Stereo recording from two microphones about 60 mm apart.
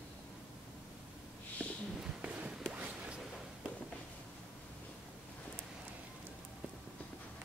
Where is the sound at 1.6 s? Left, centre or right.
Left.